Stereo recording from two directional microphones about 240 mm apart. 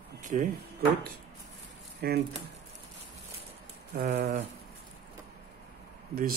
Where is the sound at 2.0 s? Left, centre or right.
Right.